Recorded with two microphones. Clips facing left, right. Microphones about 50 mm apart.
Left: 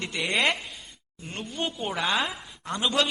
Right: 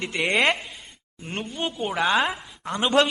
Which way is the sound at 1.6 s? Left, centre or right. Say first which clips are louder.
Right 3 dB; centre.